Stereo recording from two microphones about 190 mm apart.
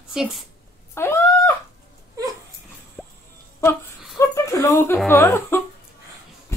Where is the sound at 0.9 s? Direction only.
15° left (ahead or behind).